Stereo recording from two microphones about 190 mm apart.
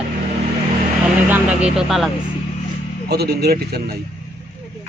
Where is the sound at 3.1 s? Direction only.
55° right (ahead or behind).